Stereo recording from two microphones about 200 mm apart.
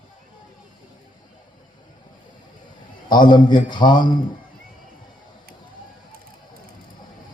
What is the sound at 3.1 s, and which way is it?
Speech, 20° left (ahead or behind).